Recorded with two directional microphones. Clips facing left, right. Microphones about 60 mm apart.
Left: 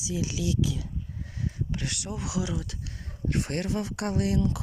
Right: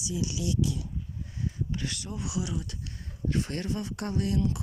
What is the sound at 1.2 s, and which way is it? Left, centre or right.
Speech, left.